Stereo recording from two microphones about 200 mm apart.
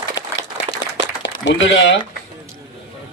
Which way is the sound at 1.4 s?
65° left (ahead or behind).